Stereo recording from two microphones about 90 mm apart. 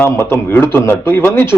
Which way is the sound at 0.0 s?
25° left (ahead or behind).